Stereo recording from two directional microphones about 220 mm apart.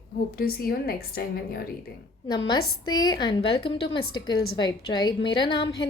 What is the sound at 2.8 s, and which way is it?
A woman's voice, 20° left (ahead or behind).